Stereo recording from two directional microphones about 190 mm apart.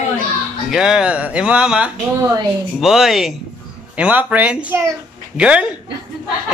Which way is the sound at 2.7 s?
Centre (ahead or behind).